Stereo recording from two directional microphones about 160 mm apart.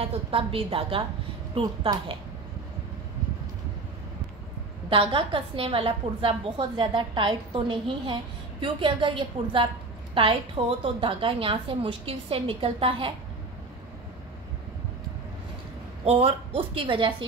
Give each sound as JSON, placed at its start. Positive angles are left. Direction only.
{"t": 0.0, "sound": "a woman's voice", "side_deg": -35}
{"t": 4.8, "sound": "a woman's voice", "side_deg": -30}
{"t": 16.0, "sound": "a woman's voice", "side_deg": -35}